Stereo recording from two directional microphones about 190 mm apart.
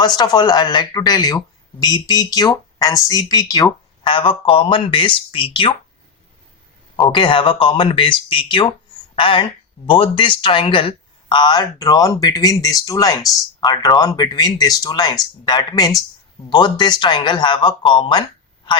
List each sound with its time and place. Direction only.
0.0 s speech: 20° left (ahead or behind)
6.9 s speech: 25° left (ahead or behind)